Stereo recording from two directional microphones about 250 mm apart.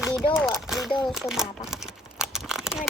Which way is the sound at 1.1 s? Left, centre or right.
Centre.